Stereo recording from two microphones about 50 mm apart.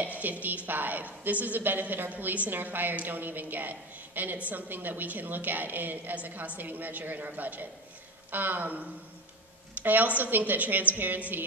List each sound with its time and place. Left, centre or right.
0.2 s a woman's voice: right
9.8 s a woman's voice: right